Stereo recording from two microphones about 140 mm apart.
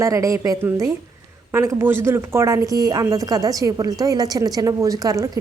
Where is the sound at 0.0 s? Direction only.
20° right (ahead or behind).